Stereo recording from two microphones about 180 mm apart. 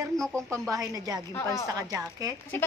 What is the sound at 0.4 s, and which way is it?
Speech, 20° right (ahead or behind).